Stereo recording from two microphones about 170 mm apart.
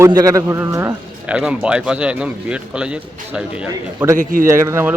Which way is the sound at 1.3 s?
5° right (ahead or behind).